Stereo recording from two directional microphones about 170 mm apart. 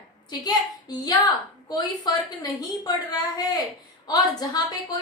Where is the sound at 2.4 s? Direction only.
25° left (ahead or behind).